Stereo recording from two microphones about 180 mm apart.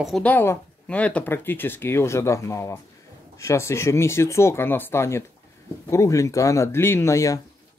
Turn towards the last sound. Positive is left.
turn(degrees=15)  # may be behind; listen again after turning